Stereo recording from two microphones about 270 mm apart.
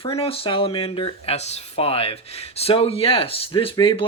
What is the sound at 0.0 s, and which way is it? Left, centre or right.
Speech, left.